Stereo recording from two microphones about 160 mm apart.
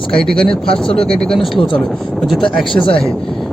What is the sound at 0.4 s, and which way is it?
Speech, 35° left (ahead or behind).